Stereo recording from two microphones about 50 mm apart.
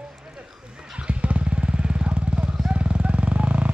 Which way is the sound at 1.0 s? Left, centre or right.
Right.